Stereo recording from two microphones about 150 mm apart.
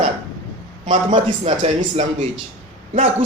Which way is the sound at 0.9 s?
35° right (ahead or behind).